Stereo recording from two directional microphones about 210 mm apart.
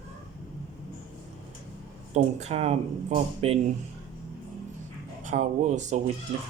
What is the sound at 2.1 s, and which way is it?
Speech, 30° right (ahead or behind).